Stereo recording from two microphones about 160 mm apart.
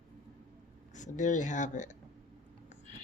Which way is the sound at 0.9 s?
50° left (ahead or behind).